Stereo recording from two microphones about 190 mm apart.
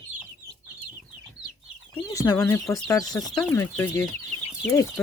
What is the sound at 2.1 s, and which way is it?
Speech, 15° left (ahead or behind).